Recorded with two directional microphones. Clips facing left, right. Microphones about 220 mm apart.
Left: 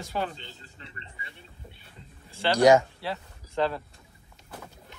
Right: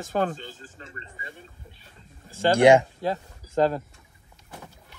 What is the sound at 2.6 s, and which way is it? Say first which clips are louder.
Speech: right 2 dB; 30° right (ahead or behind).